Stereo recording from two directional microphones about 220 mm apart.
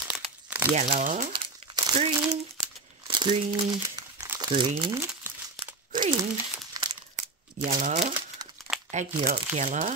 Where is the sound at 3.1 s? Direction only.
20° right (ahead or behind).